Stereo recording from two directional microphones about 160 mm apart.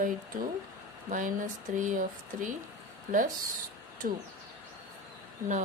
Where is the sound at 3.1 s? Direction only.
60° right (ahead or behind).